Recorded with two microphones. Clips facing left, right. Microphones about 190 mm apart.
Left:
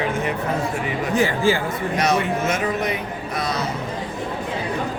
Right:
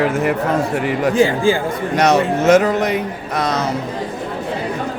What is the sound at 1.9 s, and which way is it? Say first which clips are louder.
Speech: right 7 dB; 75° right (ahead or behind).